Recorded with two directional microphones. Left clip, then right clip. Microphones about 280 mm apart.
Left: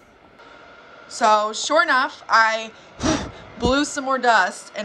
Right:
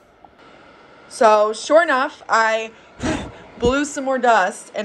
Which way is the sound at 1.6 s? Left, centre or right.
Left.